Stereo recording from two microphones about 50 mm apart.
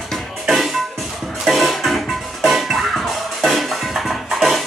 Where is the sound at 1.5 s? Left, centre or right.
Centre.